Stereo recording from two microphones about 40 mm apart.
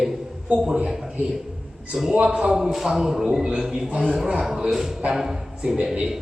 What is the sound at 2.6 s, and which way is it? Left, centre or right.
A man's voice, centre.